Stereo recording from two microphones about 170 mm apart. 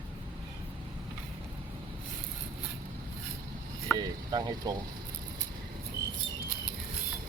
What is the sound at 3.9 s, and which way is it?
Speech, 25° right (ahead or behind).